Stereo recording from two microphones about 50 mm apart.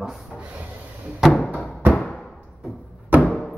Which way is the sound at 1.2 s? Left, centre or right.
Centre.